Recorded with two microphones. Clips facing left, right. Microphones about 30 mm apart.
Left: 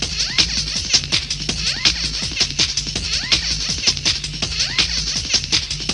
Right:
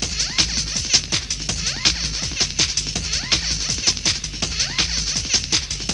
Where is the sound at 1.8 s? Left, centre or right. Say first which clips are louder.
Left 1 dB; centre.